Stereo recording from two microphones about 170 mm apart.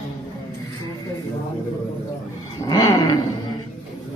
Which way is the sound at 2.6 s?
20° left (ahead or behind).